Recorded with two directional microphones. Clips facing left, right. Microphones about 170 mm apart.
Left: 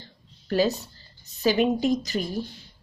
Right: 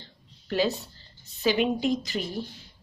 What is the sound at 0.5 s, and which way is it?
Speech, 40° left (ahead or behind).